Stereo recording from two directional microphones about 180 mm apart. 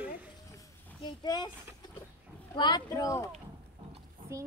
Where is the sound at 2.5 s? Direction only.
25° left (ahead or behind).